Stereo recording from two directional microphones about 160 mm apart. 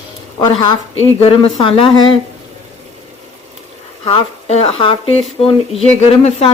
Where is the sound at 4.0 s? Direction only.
40° left (ahead or behind).